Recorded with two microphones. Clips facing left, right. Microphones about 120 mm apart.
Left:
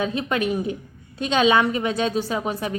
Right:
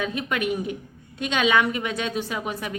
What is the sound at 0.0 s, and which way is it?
A woman's voice, 30° left (ahead or behind).